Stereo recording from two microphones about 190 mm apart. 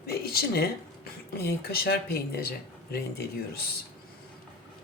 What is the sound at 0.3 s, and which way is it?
Speech, 55° left (ahead or behind).